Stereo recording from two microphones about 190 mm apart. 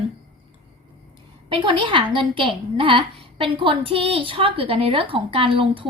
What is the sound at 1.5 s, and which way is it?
A woman's voice, 25° right (ahead or behind).